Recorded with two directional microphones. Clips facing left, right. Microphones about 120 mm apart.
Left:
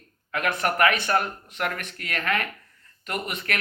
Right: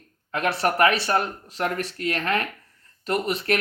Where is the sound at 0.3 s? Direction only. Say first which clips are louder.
Right 2 dB; 30° right (ahead or behind).